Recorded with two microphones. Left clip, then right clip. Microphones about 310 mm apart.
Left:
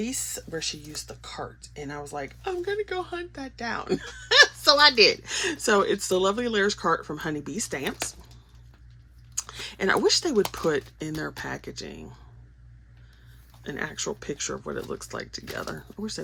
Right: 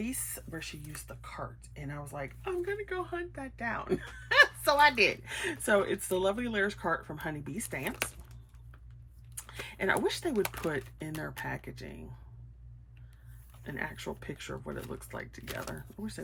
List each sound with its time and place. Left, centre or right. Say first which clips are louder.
0.0 s speech: left 7 dB; centre
9.3 s speech: left 8 dB; centre
13.7 s speech: left 7 dB; centre